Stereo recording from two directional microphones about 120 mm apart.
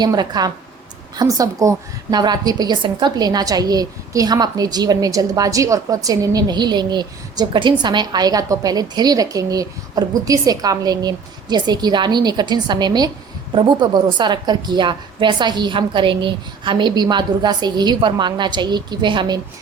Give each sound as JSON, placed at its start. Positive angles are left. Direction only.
{"t": 0.0, "sound": "a woman's voice", "side_deg": -35}